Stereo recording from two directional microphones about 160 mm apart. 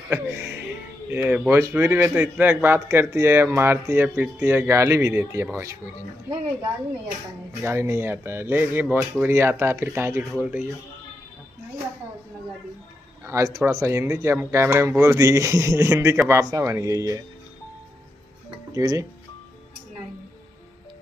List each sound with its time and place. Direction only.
0.1 s music: 10° right (ahead or behind)
1.0 s a man's voice: 10° right (ahead or behind)
7.6 s a man's voice: 15° right (ahead or behind)
13.3 s speech: 20° right (ahead or behind)
18.7 s speech: 20° right (ahead or behind)